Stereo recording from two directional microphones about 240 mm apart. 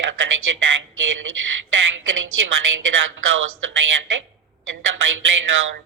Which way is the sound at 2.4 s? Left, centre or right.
Right.